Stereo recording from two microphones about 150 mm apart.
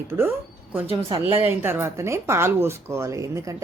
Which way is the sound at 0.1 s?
15° right (ahead or behind).